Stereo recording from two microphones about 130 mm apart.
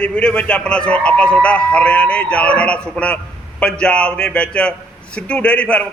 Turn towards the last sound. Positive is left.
turn(degrees=10)  # may be behind; listen again after turning